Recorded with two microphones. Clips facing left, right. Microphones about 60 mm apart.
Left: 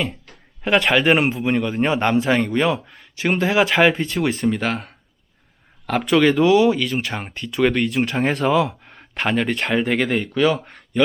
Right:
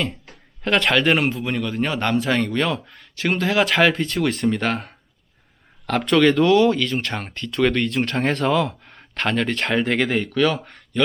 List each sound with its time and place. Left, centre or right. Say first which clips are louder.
0.6 s speech: left 2 dB; centre
4.4 s speech: even; centre